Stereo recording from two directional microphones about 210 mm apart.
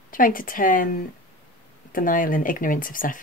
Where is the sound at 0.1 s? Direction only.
40° left (ahead or behind).